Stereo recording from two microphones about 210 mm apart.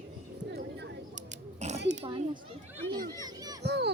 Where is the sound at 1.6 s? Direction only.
30° right (ahead or behind).